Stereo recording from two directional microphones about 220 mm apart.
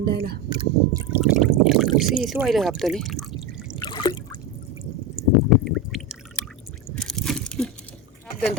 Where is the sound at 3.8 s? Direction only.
20° left (ahead or behind).